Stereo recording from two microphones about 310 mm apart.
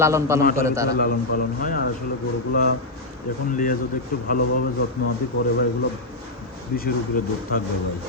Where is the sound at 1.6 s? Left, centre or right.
Left.